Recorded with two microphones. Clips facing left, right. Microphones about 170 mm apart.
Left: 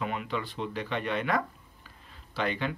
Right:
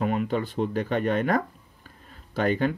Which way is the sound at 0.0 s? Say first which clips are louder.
Right 7 dB; 45° right (ahead or behind).